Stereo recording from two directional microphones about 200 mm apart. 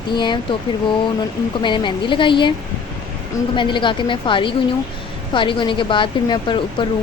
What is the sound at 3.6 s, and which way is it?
A woman's voice, 25° left (ahead or behind).